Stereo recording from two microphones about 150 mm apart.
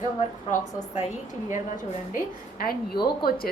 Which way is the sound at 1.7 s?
70° left (ahead or behind).